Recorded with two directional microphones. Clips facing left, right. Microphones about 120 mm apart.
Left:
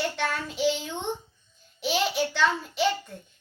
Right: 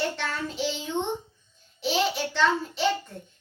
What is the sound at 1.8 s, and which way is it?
A child's voice, 5° left (ahead or behind).